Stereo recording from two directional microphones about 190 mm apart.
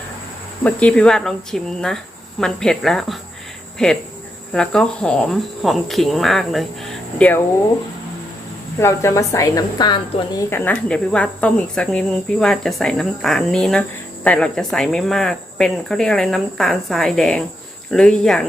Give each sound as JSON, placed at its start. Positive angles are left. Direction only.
{"t": 0.6, "sound": "a woman's voice", "side_deg": 5}
{"t": 8.8, "sound": "a woman's voice", "side_deg": 15}
{"t": 10.5, "sound": "speech", "side_deg": 10}